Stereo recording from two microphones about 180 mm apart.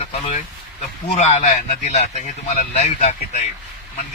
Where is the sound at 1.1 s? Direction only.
35° left (ahead or behind).